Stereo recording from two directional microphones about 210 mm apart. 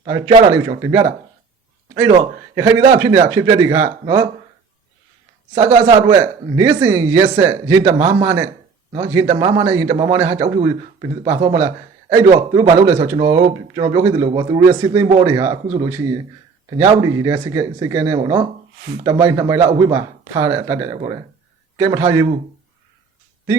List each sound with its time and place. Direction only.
0.0 s a man's voice: 20° right (ahead or behind)
2.6 s a man's voice: 15° right (ahead or behind)
5.5 s a man's voice: 15° right (ahead or behind)